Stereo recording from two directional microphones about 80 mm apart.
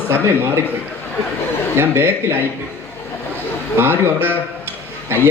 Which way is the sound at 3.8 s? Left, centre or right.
Right.